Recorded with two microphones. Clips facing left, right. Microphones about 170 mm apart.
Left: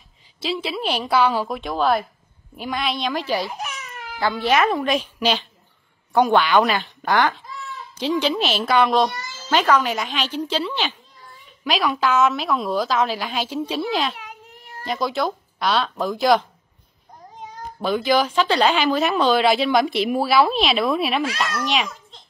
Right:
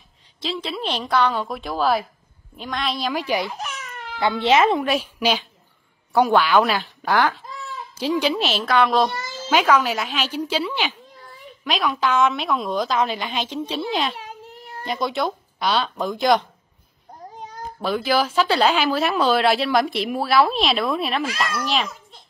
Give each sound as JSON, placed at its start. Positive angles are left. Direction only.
{"t": 0.4, "sound": "speech", "side_deg": 5}
{"t": 3.4, "sound": "baby cry", "side_deg": 15}
{"t": 4.2, "sound": "speech", "side_deg": -25}
{"t": 4.8, "sound": "speech", "side_deg": -5}
{"t": 9.3, "sound": "speech", "side_deg": -10}
{"t": 11.4, "sound": "speech", "side_deg": 0}
{"t": 17.7, "sound": "speech", "side_deg": 0}